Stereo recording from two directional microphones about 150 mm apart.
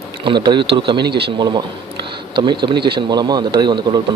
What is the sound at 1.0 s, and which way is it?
Speech, 90° right.